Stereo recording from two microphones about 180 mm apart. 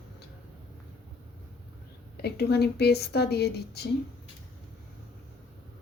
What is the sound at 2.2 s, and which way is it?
Speech, 65° left (ahead or behind).